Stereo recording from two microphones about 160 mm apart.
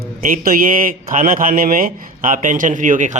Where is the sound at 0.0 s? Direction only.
60° right (ahead or behind).